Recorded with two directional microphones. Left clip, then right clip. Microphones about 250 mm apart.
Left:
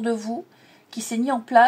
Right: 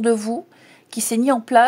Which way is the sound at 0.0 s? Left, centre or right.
Right.